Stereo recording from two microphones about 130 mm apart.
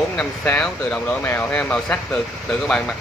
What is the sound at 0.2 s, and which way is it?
Speech, 5° left (ahead or behind).